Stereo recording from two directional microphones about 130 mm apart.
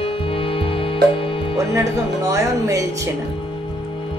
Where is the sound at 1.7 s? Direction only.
25° right (ahead or behind).